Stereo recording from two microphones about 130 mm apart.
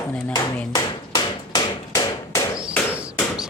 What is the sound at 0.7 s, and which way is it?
Hammer, 35° left (ahead or behind).